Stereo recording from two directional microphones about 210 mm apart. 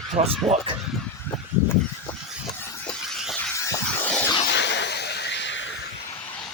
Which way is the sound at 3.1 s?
Centre (ahead or behind).